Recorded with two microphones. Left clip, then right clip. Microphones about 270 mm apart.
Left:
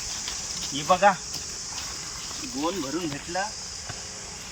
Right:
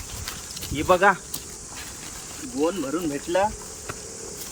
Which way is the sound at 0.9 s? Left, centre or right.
Centre.